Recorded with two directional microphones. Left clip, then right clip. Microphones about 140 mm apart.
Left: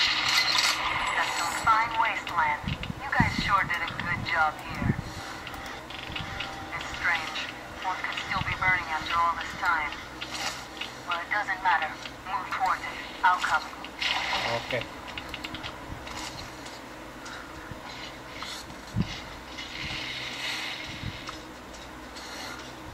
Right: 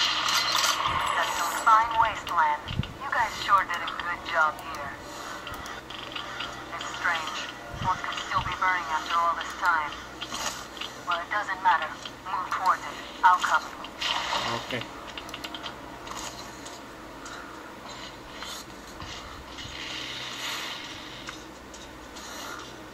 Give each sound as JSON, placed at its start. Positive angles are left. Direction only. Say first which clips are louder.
{"t": 0.0, "sound": "a sound", "louder": "left 1 dB", "side_deg": -45}
{"t": 6.1, "sound": "music", "louder": "even", "side_deg": -45}
{"t": 13.2, "sound": "speech", "louder": "right 3 dB", "side_deg": -45}
{"t": 19.8, "sound": "vehicle", "louder": "left 1 dB", "side_deg": -45}